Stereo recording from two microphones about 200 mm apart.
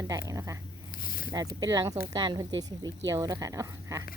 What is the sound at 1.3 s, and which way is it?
Speech, 20° right (ahead or behind).